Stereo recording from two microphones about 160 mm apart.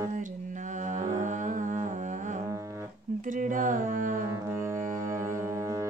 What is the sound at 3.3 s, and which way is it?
Music, 55° right (ahead or behind).